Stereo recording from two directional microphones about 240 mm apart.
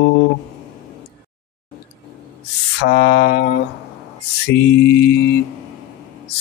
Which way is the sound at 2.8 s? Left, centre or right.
Left.